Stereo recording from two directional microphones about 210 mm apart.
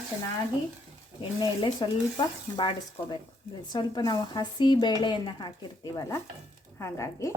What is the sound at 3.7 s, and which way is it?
A woman's voice, 20° left (ahead or behind).